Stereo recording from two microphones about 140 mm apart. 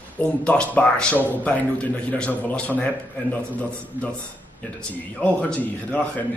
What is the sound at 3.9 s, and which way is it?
Speech, 15° right (ahead or behind).